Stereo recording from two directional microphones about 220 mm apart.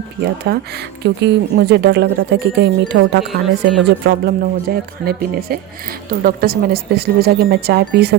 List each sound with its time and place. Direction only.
0.2 s speech: 45° right (ahead or behind)
3.2 s speech: centre (ahead or behind)
4.0 s speech: 45° right (ahead or behind)